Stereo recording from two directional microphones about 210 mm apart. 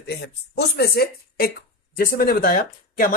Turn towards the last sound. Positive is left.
turn(degrees=40)  # may be behind; listen again after turning